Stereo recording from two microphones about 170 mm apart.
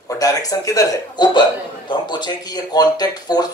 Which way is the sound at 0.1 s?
20° left (ahead or behind).